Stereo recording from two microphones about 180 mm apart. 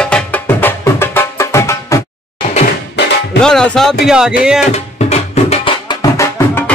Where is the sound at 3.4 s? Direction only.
5° left (ahead or behind).